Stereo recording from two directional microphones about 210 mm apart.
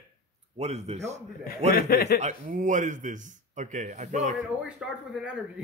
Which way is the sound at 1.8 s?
45° left (ahead or behind).